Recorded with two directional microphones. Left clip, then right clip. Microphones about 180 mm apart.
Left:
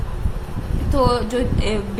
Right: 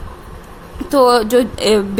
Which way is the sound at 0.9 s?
55° right (ahead or behind).